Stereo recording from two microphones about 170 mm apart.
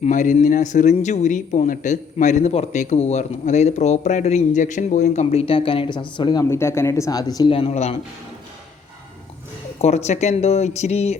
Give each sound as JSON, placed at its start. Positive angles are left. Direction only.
{"t": 0.0, "sound": "speech", "side_deg": 45}
{"t": 6.4, "sound": "a man's voice", "side_deg": 15}
{"t": 9.8, "sound": "speech", "side_deg": 40}